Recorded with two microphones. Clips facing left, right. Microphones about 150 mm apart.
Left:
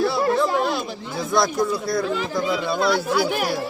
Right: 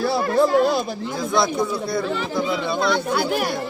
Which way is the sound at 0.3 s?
40° right (ahead or behind).